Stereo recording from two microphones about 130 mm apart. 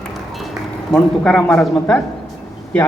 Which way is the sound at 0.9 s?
10° left (ahead or behind).